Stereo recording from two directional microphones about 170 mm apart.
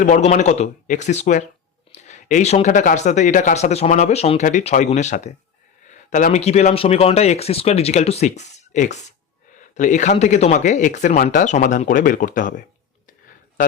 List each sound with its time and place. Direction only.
0.0 s speech: 45° left (ahead or behind)